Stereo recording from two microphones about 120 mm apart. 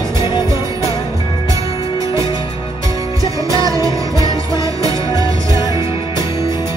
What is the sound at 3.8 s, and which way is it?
Music, 30° right (ahead or behind).